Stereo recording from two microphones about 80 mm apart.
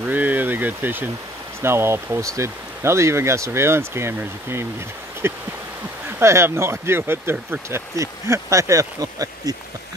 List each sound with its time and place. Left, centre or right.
0.1 s speech: right